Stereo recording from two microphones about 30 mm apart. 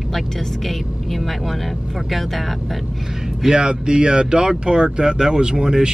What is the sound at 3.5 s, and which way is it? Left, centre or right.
Speech, right.